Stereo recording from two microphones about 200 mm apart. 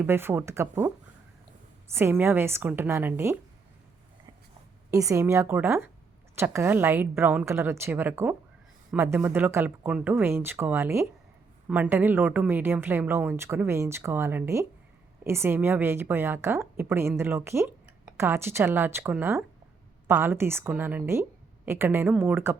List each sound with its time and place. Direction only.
0.0 s a woman's voice: 10° right (ahead or behind)
2.0 s a woman's voice: 10° right (ahead or behind)
4.9 s a woman's voice: 15° right (ahead or behind)